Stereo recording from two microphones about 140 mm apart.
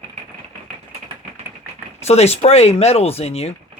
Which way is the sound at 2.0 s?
50° left (ahead or behind).